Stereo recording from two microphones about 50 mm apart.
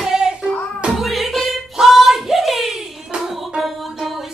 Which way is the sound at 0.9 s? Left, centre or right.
Centre.